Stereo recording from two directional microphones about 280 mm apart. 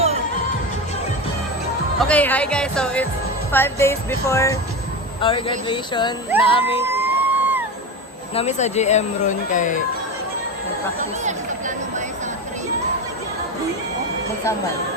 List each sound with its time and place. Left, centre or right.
2.0 s speech: centre
6.8 s music: centre
8.4 s speech: left
11.2 s a sound: right